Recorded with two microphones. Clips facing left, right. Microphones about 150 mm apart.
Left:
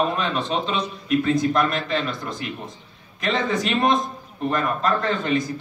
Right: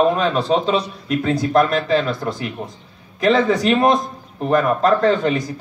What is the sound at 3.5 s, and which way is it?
A man's voice, 35° right (ahead or behind).